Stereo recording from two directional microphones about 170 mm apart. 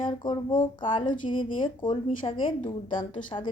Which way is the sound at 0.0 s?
25° left (ahead or behind).